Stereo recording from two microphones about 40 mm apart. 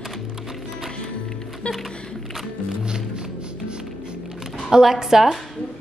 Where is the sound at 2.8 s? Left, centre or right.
Right.